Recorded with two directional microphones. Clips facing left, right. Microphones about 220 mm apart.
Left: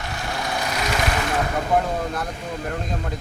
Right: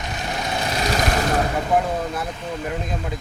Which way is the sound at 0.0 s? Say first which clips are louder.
Right 1 dB; 20° right (ahead or behind).